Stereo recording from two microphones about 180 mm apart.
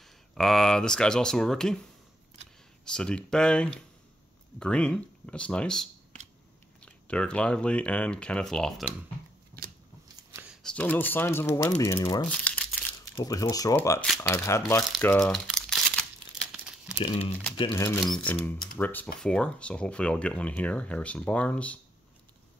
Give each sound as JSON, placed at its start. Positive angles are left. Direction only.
{"t": 0.0, "sound": "speech", "side_deg": 0}
{"t": 2.8, "sound": "speech", "side_deg": 5}
{"t": 9.5, "sound": "scissors", "side_deg": -15}
{"t": 10.3, "sound": "a sound", "side_deg": -10}
{"t": 10.6, "sound": "speech", "side_deg": 5}
{"t": 12.3, "sound": "crumpling", "side_deg": 5}
{"t": 13.1, "sound": "speech", "side_deg": 20}
{"t": 15.0, "sound": "crumpling", "side_deg": 10}
{"t": 17.0, "sound": "speech", "side_deg": 35}
{"t": 17.6, "sound": "speech", "side_deg": 15}